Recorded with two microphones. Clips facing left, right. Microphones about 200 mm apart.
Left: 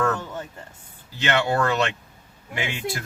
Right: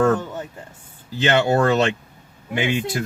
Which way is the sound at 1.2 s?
25° right (ahead or behind).